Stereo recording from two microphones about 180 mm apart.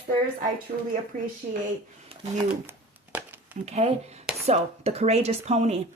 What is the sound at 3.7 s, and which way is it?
Speech, 35° right (ahead or behind).